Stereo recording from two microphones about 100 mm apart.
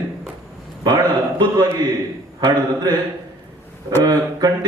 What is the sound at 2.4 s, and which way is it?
Speech, 45° right (ahead or behind).